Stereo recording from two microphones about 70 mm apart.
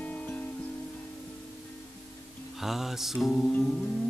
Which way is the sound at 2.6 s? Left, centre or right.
Centre.